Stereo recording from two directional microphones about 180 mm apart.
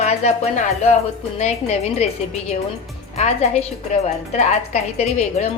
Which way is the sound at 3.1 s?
40° left (ahead or behind).